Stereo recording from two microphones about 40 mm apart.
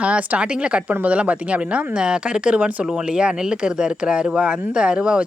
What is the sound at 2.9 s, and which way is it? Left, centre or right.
A woman's voice, right.